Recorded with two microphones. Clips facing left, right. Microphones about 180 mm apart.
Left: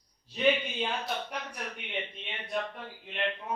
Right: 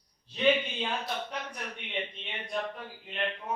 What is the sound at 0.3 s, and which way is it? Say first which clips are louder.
A man's voice: right 1 dB; 10° left (ahead or behind).